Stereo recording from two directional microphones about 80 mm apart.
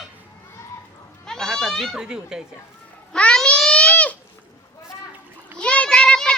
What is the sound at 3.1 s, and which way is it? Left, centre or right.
Babbling, centre.